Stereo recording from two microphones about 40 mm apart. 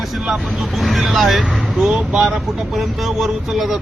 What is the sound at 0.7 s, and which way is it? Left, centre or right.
Speech, centre.